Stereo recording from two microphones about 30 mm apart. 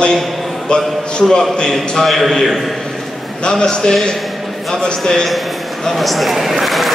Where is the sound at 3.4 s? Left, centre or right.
Left.